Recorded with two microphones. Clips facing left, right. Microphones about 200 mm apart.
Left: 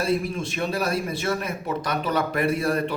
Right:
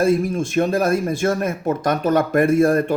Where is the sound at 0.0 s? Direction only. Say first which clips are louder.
Right 7 dB; 45° right (ahead or behind).